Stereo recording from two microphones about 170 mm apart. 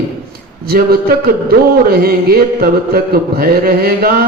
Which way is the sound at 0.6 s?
65° right (ahead or behind).